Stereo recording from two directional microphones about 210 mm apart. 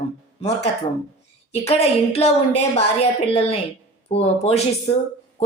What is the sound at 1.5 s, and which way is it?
A woman's voice, 30° left (ahead or behind).